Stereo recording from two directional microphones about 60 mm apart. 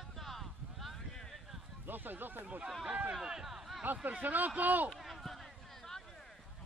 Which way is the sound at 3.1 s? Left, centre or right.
Centre.